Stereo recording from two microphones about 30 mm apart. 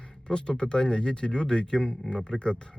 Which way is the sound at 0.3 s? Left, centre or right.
Left.